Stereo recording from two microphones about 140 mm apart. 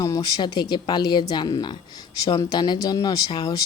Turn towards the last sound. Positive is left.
turn(degrees=30)  # may be behind; listen again after turning